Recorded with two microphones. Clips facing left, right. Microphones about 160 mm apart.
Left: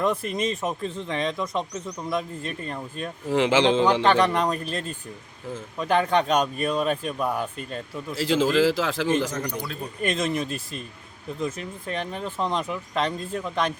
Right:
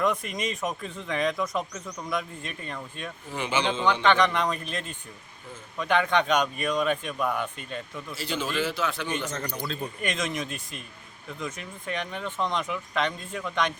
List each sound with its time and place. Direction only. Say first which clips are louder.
0.0 s speech: left 3 dB; 30° left (ahead or behind)
3.2 s speech: left 8 dB; 90° left
4.0 s speech: left 2 dB; 35° left (ahead or behind)
8.1 s speech: left 9 dB; 90° left
9.3 s a man's voice: left 3 dB; 10° left (ahead or behind)
10.0 s speech: left 7 dB; 35° left (ahead or behind)